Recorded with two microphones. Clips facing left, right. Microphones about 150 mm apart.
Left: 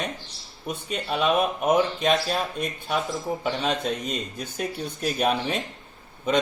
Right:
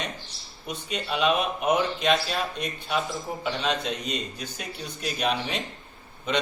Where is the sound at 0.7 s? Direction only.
50° left (ahead or behind).